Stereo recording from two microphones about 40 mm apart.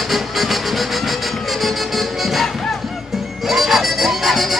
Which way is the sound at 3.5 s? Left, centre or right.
Centre.